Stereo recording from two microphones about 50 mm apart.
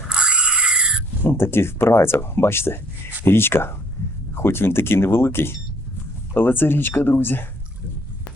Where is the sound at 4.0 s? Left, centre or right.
Left.